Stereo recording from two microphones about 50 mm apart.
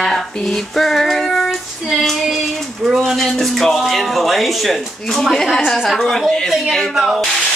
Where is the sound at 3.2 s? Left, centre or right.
Centre.